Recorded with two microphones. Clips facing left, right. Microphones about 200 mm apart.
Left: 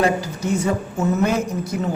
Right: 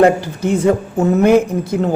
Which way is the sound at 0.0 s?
55° right (ahead or behind).